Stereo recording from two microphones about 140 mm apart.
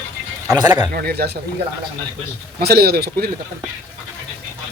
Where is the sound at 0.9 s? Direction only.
90° right.